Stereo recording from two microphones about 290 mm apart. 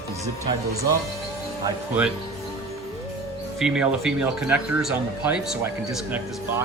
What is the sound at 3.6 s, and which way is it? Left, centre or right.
Speech, centre.